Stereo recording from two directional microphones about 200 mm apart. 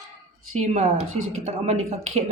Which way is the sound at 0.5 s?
35° right (ahead or behind).